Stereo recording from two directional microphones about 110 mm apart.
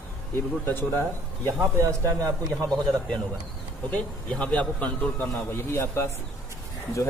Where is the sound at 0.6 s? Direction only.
20° left (ahead or behind).